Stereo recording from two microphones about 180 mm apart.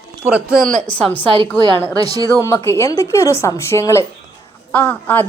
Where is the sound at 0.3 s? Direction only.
10° right (ahead or behind).